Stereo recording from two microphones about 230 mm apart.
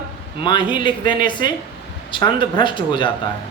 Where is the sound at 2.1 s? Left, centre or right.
Left.